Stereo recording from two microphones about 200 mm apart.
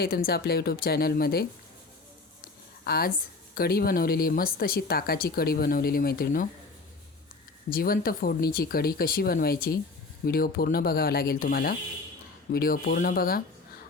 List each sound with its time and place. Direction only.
0.0 s speech: 50° left (ahead or behind)
2.8 s speech: 50° left (ahead or behind)
7.7 s speech: 45° left (ahead or behind)